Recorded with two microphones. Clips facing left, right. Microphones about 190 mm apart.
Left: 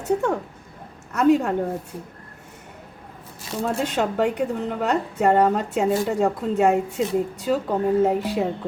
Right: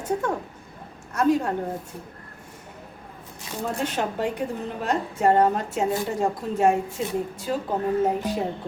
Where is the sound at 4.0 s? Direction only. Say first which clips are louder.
Left 6 dB; 70° left (ahead or behind).